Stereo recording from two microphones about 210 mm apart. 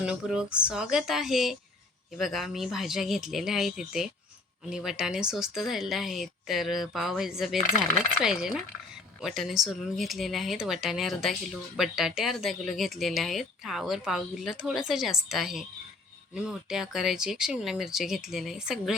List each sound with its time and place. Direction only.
0.0 s speech: 5° right (ahead or behind)